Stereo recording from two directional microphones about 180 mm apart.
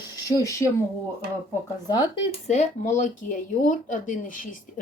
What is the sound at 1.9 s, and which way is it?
Speech, 20° left (ahead or behind).